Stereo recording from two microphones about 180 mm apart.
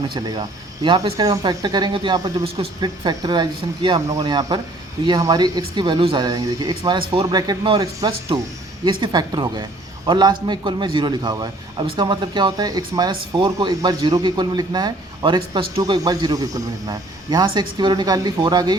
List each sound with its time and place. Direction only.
0.1 s a man's voice: 25° right (ahead or behind)